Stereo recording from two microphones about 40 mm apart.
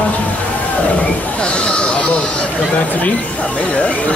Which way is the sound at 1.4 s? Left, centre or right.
Left.